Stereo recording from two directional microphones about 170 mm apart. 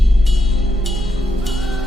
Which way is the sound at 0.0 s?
Centre (ahead or behind).